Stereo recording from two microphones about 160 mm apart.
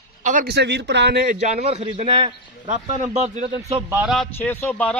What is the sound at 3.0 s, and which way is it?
Speech, 45° right (ahead or behind).